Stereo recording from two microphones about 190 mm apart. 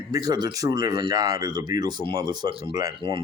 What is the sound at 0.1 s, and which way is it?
A man's voice, 20° right (ahead or behind).